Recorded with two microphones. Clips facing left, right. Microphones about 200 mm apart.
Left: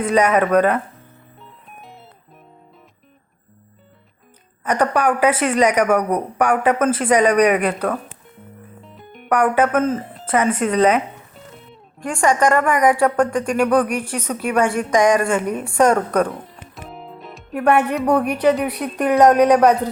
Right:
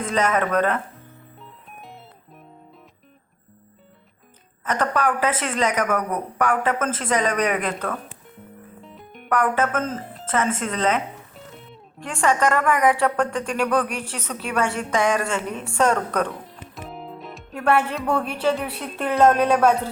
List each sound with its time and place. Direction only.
0.1 s speech: 10° left (ahead or behind)
1.4 s music: centre (ahead or behind)
4.6 s speech: 15° left (ahead or behind)
6.0 s speech: 35° left (ahead or behind)
6.4 s speech: 15° left (ahead or behind)
8.8 s music: centre (ahead or behind)
9.3 s speech: 15° left (ahead or behind)
10.2 s speech: 15° left (ahead or behind)
11.3 s music: centre (ahead or behind)
11.9 s speech: 15° left (ahead or behind)
16.3 s music: centre (ahead or behind)
17.6 s speech: 15° left (ahead or behind)